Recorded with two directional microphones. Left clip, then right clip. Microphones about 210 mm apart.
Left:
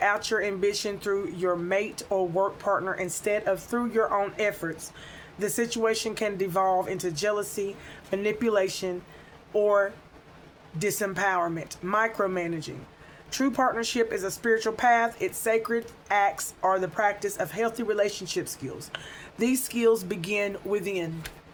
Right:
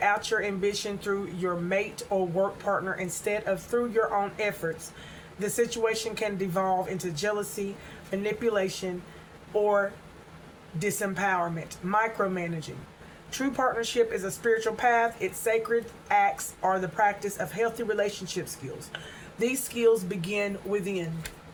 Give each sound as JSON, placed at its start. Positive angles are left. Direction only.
{"t": 0.0, "sound": "speech", "side_deg": 50}